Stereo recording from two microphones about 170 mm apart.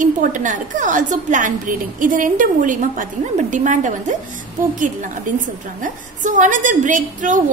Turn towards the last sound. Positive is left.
turn(degrees=-50)  # may be behind; listen again after turning